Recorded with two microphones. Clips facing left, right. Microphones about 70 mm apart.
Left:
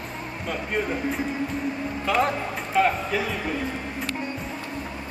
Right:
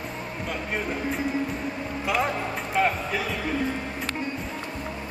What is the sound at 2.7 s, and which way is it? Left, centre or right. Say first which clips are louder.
Music: left 3 dB; centre.